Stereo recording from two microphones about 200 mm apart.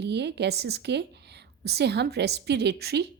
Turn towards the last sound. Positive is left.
turn(degrees=-55)  # may be behind; listen again after turning